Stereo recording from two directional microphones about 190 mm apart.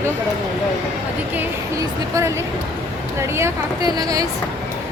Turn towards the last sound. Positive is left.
turn(degrees=-20)  # may be behind; listen again after turning